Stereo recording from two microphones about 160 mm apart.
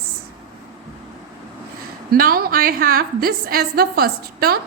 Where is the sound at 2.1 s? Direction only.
65° right (ahead or behind).